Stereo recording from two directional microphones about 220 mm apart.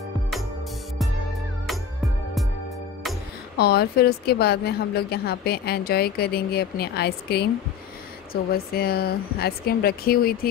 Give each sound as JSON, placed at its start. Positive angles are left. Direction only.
{"t": 3.5, "sound": "a woman's voice", "side_deg": 45}